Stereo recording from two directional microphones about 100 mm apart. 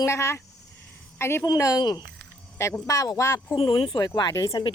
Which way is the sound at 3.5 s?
60° left (ahead or behind).